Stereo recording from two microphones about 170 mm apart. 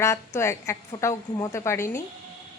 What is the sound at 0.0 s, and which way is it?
A woman's voice, 15° left (ahead or behind).